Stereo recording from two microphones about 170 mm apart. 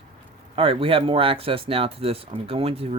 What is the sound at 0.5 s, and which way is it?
Speech, 30° right (ahead or behind).